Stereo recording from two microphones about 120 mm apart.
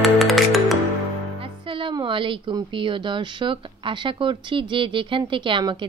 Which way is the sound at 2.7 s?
45° right (ahead or behind).